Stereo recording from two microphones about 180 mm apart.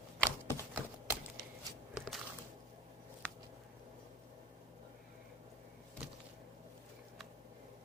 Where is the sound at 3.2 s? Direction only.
5° left (ahead or behind).